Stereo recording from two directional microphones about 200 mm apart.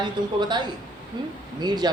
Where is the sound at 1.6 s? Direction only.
20° right (ahead or behind).